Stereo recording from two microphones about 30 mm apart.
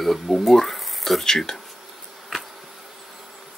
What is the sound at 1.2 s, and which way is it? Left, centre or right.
Speech, centre.